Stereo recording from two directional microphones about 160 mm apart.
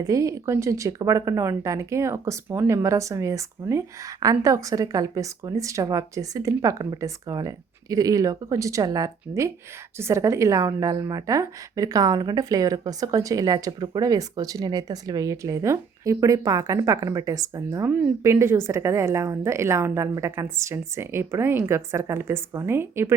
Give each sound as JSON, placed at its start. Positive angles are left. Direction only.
{"t": 0.0, "sound": "a woman's voice", "side_deg": -20}